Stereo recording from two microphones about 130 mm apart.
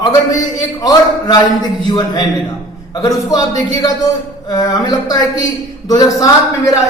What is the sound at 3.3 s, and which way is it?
A man's voice, 30° left (ahead or behind).